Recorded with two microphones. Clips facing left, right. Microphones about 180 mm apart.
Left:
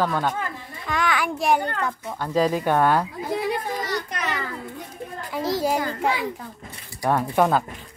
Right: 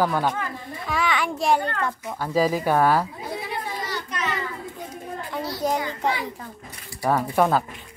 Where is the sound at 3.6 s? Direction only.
60° left (ahead or behind).